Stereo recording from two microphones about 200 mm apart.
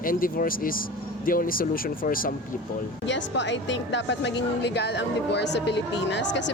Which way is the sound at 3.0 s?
65° left (ahead or behind).